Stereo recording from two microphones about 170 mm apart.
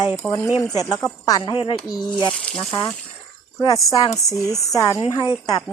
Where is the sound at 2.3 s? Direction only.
5° left (ahead or behind).